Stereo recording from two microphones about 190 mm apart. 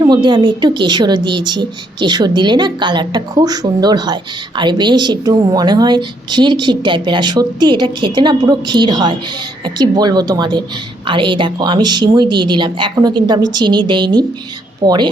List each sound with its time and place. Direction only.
0.0 s a woman's voice: 25° right (ahead or behind)